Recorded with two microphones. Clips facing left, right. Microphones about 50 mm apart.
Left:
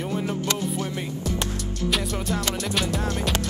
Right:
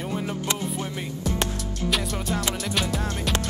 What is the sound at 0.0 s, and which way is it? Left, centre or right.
Music, centre.